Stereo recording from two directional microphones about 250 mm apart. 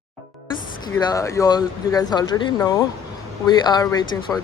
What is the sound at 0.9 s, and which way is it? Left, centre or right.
Speech, centre.